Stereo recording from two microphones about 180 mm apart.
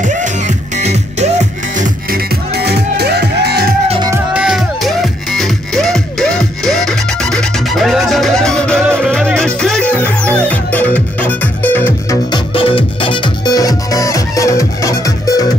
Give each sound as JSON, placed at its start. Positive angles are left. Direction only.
{"t": 0.0, "sound": "music", "side_deg": -45}
{"t": 2.5, "sound": "music", "side_deg": -65}
{"t": 4.1, "sound": "music", "side_deg": -5}
{"t": 12.3, "sound": "music", "side_deg": 30}